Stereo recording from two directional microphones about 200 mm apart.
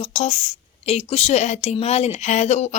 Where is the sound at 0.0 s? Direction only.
35° left (ahead or behind).